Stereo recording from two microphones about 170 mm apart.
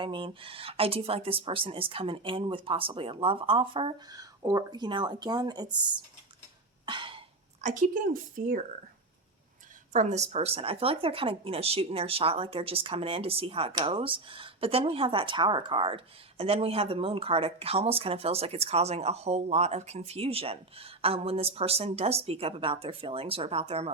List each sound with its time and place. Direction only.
0.0 s speech: 30° right (ahead or behind)
6.8 s cough: 30° right (ahead or behind)
7.6 s speech: 50° right (ahead or behind)
9.9 s speech: 45° right (ahead or behind)